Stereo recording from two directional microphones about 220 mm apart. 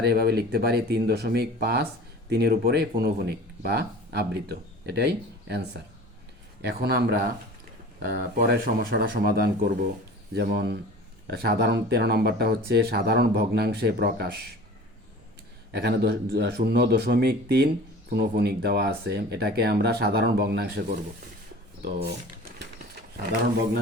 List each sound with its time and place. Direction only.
0.0 s speech: 45° right (ahead or behind)
15.7 s speech: 45° right (ahead or behind)